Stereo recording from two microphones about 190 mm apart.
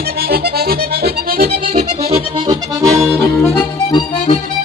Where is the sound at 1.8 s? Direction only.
30° right (ahead or behind).